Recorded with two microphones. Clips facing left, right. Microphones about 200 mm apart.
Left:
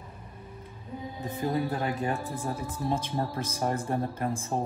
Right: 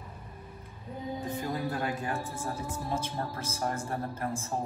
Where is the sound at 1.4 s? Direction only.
20° left (ahead or behind).